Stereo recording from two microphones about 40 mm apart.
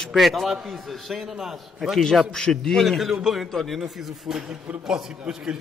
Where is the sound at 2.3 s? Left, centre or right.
Centre.